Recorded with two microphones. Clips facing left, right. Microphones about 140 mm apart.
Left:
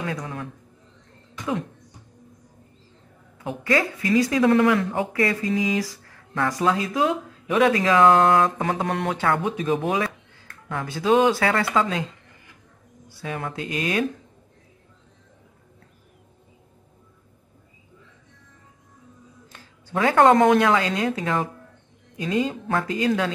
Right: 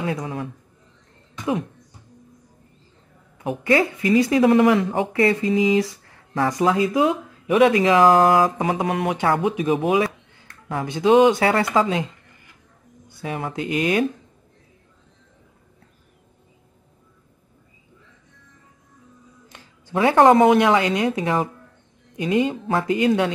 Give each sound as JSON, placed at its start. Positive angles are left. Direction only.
{"t": 0.0, "sound": "speech", "side_deg": -20}
{"t": 1.3, "sound": "a sound", "side_deg": -20}
{"t": 3.4, "sound": "speech", "side_deg": -20}
{"t": 8.4, "sound": "a sound", "side_deg": -10}
{"t": 10.7, "sound": "speech", "side_deg": -25}
{"t": 13.2, "sound": "speech", "side_deg": -25}
{"t": 13.6, "sound": "speech", "side_deg": 35}
{"t": 19.5, "sound": "a sound", "side_deg": -15}
{"t": 20.5, "sound": "speech", "side_deg": -20}